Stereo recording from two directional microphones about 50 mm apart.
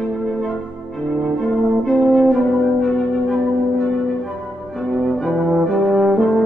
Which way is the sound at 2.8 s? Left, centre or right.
Centre.